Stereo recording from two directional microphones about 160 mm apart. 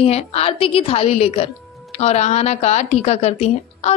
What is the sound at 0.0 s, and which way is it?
A woman's voice, 40° left (ahead or behind).